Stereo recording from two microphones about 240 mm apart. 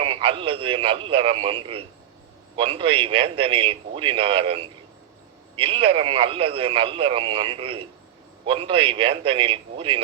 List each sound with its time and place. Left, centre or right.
0.0 s speech: right